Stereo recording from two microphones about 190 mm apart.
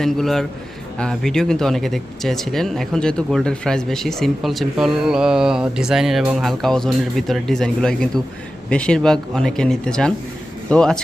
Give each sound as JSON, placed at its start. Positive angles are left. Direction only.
{"t": 0.0, "sound": "speech", "side_deg": 0}